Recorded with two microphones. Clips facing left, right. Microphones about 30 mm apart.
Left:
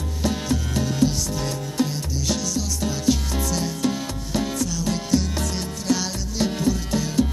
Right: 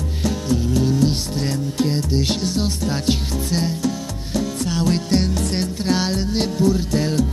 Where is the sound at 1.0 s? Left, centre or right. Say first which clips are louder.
Right 2 dB; right.